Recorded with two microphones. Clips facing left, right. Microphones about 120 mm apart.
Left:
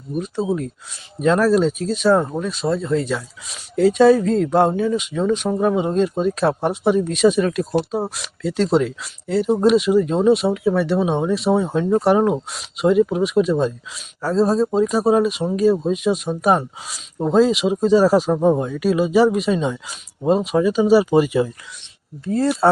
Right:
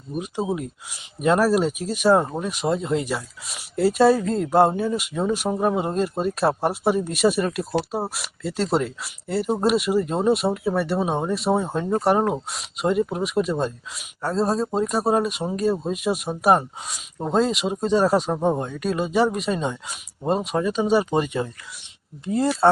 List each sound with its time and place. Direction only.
0.2 s speech: 15° right (ahead or behind); by 21.5 s 5° left (ahead or behind)
22.2 s speech: 15° right (ahead or behind)